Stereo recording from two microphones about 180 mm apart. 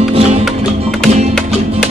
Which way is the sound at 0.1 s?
35° right (ahead or behind).